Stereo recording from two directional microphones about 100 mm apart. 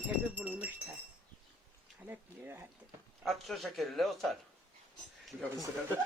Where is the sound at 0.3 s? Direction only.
15° right (ahead or behind).